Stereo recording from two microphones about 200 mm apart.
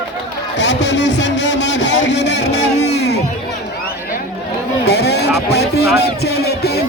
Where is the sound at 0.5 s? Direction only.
60° left (ahead or behind).